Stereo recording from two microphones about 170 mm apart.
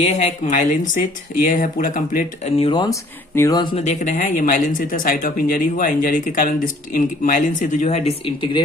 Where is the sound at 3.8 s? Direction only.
50° left (ahead or behind).